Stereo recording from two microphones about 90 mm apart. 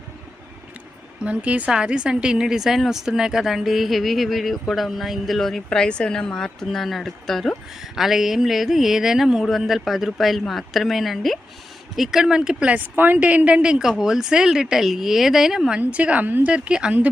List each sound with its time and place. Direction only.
1.2 s a woman's voice: 15° right (ahead or behind)